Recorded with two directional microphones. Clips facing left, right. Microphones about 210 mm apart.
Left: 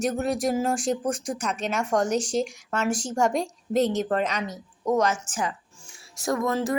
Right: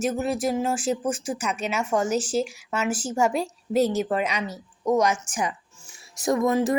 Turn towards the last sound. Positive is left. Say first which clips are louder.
# right 4 dB
turn(degrees=-20)  # may be behind; listen again after turning